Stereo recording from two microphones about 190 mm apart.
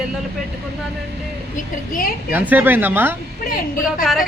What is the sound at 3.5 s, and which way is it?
Speech, 45° left (ahead or behind).